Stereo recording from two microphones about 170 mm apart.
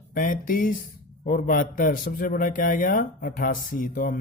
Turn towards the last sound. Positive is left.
turn(degrees=55)  # may be behind; listen again after turning